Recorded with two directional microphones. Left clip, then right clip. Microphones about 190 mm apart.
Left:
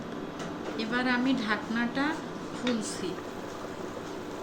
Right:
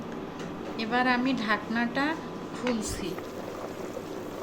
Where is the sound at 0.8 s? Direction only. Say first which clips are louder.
Right 3 dB; 55° right (ahead or behind).